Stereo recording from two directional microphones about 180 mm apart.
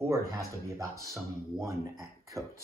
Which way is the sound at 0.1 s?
15° right (ahead or behind).